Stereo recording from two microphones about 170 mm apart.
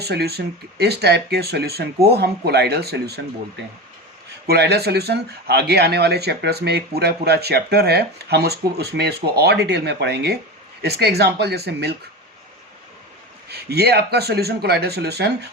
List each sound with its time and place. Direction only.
0.0 s speech: 70° right (ahead or behind)
4.4 s speech: 70° right (ahead or behind)
13.5 s speech: 70° right (ahead or behind)